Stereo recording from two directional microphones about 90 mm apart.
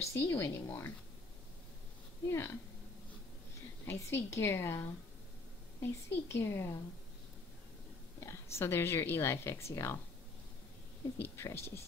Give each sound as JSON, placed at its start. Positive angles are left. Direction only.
{"t": 0.1, "sound": "a woman's voice", "side_deg": 30}
{"t": 2.2, "sound": "a woman's voice", "side_deg": 25}
{"t": 3.8, "sound": "a woman's voice", "side_deg": 25}
{"t": 8.2, "sound": "a woman's voice", "side_deg": 30}
{"t": 11.1, "sound": "a woman's voice", "side_deg": 25}